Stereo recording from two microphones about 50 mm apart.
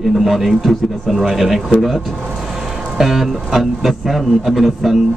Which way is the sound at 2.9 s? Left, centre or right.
Centre.